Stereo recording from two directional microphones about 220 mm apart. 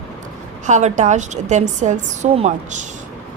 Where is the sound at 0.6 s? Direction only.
35° right (ahead or behind).